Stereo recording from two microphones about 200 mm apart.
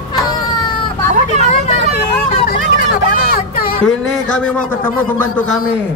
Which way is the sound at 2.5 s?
45° left (ahead or behind).